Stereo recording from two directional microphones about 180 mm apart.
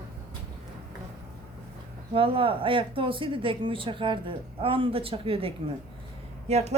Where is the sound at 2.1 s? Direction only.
30° right (ahead or behind).